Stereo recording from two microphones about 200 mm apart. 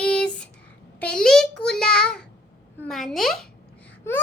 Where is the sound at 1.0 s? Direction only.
5° left (ahead or behind).